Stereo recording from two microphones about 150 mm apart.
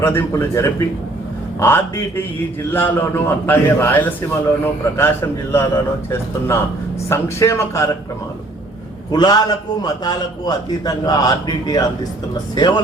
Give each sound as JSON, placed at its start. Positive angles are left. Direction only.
{"t": 0.0, "sound": "a man's voice", "side_deg": 15}
{"t": 9.1, "sound": "a man's voice", "side_deg": 25}